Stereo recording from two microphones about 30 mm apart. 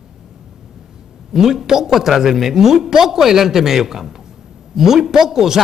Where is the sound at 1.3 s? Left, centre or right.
Centre.